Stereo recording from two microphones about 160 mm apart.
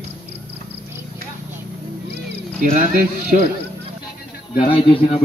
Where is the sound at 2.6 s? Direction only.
55° right (ahead or behind).